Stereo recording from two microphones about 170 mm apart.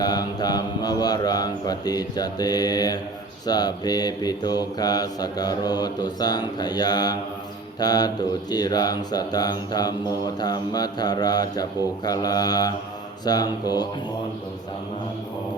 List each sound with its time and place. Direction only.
0.0 s speech: 25° left (ahead or behind)
3.4 s mantra: 25° left (ahead or behind)